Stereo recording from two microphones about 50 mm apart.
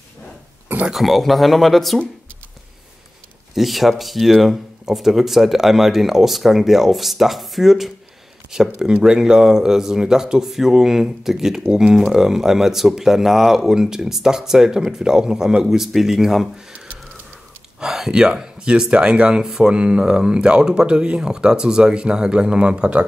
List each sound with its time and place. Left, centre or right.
0.9 s speech: centre
3.5 s speech: centre
17.7 s speech: centre